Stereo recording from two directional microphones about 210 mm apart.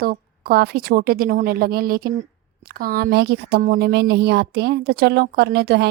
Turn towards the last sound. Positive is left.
turn(degrees=-50)  # may be behind; listen again after turning